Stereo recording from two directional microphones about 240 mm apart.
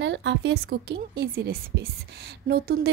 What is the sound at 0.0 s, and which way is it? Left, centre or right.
A woman's voice, right.